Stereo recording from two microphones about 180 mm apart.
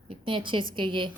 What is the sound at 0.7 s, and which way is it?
Speech, 25° right (ahead or behind).